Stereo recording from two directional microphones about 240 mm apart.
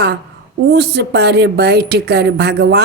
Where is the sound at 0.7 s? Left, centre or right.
Right.